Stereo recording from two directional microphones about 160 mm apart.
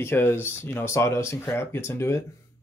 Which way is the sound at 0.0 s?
15° left (ahead or behind).